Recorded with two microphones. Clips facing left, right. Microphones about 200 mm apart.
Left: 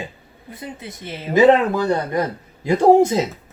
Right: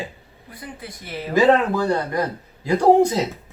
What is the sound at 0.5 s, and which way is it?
A man's voice, 25° left (ahead or behind).